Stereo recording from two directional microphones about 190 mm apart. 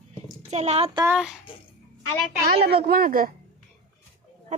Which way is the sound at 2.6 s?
55° right (ahead or behind).